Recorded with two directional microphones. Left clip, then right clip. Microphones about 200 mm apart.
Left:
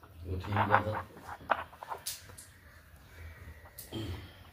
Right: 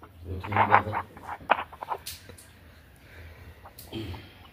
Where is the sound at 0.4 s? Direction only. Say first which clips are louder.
Right 7 dB; 20° right (ahead or behind).